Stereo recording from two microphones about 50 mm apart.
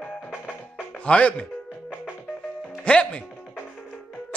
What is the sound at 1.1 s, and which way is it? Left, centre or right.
Speech, left.